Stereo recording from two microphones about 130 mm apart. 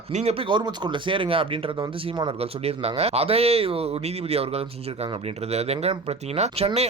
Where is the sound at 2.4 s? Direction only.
50° right (ahead or behind).